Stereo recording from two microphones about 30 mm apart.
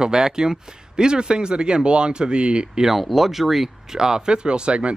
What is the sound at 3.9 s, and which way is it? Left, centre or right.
Speech, right.